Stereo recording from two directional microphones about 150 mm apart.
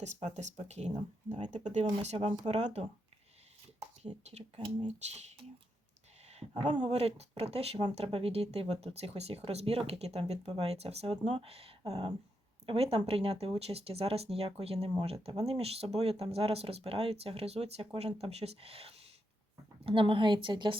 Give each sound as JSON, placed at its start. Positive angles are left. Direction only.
{"t": 0.0, "sound": "speech", "side_deg": -50}
{"t": 4.0, "sound": "speech", "side_deg": -45}
{"t": 6.6, "sound": "speech", "side_deg": -30}